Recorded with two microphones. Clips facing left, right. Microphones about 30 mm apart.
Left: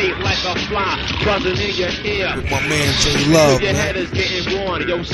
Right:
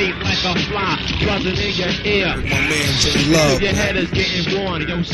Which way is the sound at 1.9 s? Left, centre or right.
Right.